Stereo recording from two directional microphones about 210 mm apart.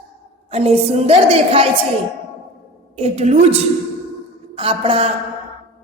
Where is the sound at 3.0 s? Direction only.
30° right (ahead or behind).